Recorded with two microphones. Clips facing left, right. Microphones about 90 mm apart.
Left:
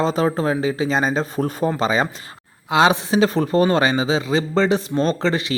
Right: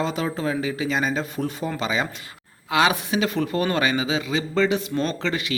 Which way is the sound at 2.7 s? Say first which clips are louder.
Left 4 dB; 30° left (ahead or behind).